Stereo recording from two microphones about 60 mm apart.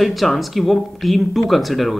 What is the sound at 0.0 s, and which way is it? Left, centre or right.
A woman's voice, centre.